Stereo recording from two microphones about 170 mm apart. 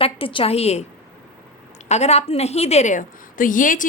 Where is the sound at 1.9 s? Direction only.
40° left (ahead or behind).